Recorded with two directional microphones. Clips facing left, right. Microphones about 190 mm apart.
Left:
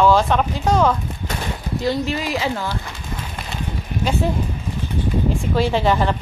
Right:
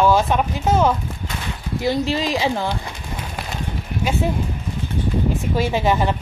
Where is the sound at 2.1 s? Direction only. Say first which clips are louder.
Right 2 dB; 20° right (ahead or behind).